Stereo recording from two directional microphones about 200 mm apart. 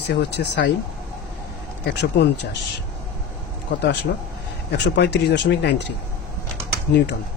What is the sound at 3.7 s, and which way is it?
Speech, 55° left (ahead or behind).